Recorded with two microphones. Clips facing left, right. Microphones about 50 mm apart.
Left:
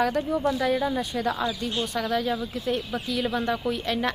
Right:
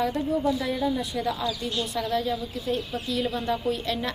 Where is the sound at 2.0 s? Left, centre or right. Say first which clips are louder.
Left 1 dB; left.